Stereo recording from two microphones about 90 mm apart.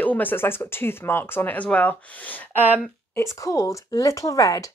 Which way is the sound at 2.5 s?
20° right (ahead or behind).